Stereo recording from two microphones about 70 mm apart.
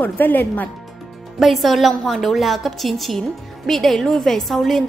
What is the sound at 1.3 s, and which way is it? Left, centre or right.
A woman's voice, centre.